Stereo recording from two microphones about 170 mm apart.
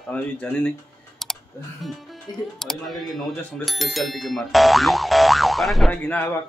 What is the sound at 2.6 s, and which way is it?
A woman's voice, centre (ahead or behind).